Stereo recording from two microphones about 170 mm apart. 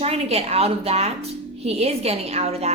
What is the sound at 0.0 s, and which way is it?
Speech, 35° right (ahead or behind).